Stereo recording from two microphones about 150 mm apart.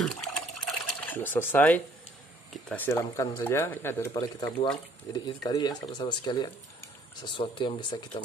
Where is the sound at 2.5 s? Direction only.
5° left (ahead or behind).